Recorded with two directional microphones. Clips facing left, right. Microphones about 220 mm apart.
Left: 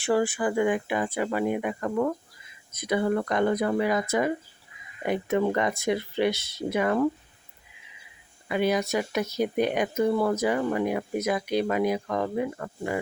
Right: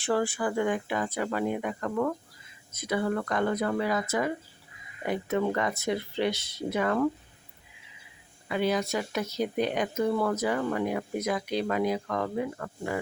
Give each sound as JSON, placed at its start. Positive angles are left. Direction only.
{"t": 0.0, "sound": "speech", "side_deg": 15}
{"t": 5.0, "sound": "speech", "side_deg": 15}
{"t": 8.4, "sound": "speech", "side_deg": 15}